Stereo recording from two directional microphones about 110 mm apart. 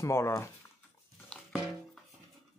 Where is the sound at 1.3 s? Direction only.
5° left (ahead or behind).